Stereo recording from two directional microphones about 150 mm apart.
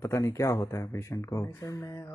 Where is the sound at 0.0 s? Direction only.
20° left (ahead or behind).